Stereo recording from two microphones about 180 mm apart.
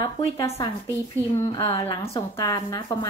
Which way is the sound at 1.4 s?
20° left (ahead or behind).